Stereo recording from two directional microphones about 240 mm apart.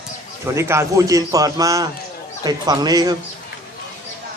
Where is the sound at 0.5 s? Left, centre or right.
Centre.